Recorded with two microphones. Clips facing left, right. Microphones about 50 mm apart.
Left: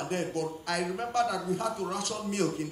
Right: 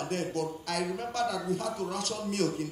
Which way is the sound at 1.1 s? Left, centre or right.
Left.